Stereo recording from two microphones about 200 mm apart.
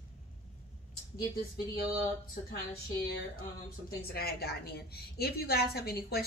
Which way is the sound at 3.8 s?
50° left (ahead or behind).